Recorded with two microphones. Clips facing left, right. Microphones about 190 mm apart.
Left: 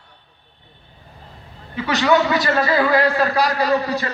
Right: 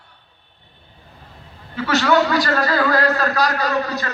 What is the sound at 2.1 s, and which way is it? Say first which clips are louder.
A man's voice: left 1 dB; 20° left (ahead or behind).